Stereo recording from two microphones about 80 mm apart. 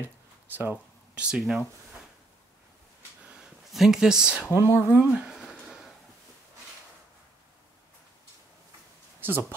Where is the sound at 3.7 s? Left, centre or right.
Centre.